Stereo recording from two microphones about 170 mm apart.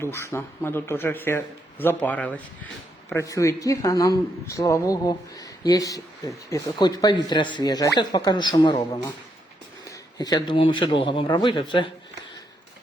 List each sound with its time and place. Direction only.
0.0 s a man's voice: 15° left (ahead or behind)